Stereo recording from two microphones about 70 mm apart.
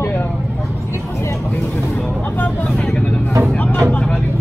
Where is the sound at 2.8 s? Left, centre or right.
Centre.